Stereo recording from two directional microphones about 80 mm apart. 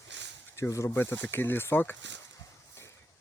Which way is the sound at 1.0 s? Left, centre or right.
Left.